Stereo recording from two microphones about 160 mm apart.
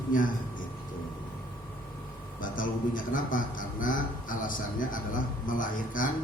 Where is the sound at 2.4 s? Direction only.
60° left (ahead or behind).